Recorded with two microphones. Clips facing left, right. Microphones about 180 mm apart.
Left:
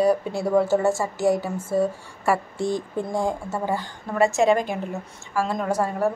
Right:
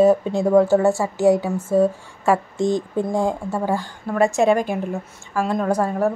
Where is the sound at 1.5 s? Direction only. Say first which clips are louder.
Right 5 dB; 40° right (ahead or behind).